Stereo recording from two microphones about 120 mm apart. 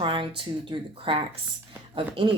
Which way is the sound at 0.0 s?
45° right (ahead or behind).